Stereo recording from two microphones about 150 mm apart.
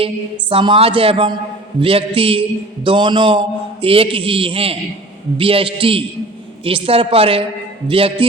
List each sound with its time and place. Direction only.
0.5 s a man's voice: 35° right (ahead or behind)